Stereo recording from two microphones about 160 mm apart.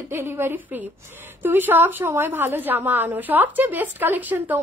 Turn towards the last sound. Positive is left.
turn(degrees=-10)  # may be behind; listen again after turning